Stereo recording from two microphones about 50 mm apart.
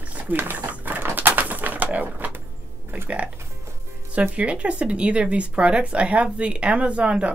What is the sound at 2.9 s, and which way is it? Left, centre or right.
Speech, right.